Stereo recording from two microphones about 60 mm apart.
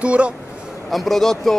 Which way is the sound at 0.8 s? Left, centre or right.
Centre.